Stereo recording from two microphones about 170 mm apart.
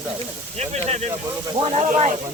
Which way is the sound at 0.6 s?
40° right (ahead or behind).